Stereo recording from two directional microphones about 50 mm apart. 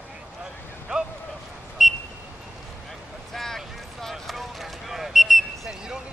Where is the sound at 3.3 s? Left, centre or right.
Centre.